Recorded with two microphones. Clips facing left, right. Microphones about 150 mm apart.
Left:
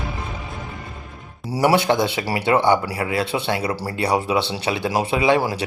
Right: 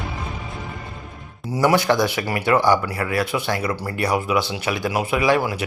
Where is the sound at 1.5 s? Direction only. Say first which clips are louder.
Even; 25° left (ahead or behind).